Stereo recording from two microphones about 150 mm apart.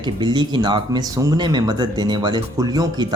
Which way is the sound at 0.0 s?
30° right (ahead or behind).